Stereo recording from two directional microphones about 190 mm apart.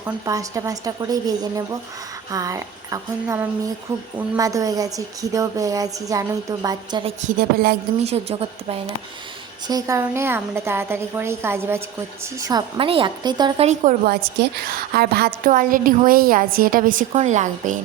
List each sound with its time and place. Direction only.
0.0 s a woman's voice: 15° right (ahead or behind)
7.2 s a woman's voice: 50° right (ahead or behind)
8.0 s speech: 30° right (ahead or behind)
9.6 s a woman's voice: 20° right (ahead or behind)
13.7 s speech: 40° right (ahead or behind)
14.1 s a woman's voice: 50° right (ahead or behind)